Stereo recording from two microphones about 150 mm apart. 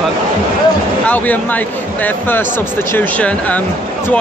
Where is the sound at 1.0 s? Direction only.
10° left (ahead or behind).